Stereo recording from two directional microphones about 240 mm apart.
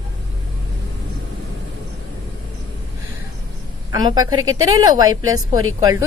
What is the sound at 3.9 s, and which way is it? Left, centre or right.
Speech, centre.